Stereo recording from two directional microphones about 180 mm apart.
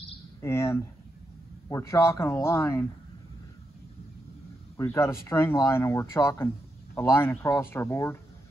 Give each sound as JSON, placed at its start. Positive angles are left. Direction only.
{"t": 0.4, "sound": "speech", "side_deg": 15}
{"t": 4.7, "sound": "speech", "side_deg": 15}